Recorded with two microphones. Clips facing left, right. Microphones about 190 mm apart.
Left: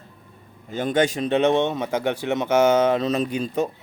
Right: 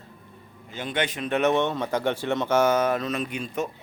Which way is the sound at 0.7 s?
45° left (ahead or behind).